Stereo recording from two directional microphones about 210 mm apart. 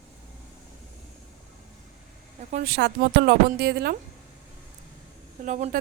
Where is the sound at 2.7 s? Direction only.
50° right (ahead or behind).